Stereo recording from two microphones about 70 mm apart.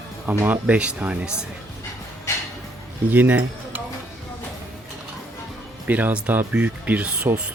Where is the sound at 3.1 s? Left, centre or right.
Right.